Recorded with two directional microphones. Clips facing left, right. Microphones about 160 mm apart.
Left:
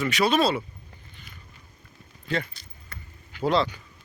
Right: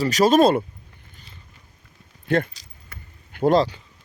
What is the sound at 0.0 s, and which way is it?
Speech, 40° right (ahead or behind).